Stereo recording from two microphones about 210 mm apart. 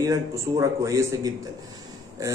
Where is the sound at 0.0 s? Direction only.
15° right (ahead or behind).